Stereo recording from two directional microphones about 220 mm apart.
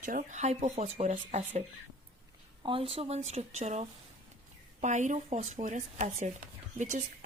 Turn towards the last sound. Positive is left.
turn(degrees=-35)  # may be behind; listen again after turning